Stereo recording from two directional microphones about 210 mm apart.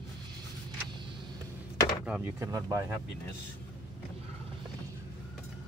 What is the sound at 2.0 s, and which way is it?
Speech, 5° right (ahead or behind).